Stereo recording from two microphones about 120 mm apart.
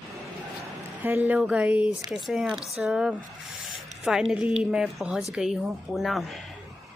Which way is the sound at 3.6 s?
5° right (ahead or behind).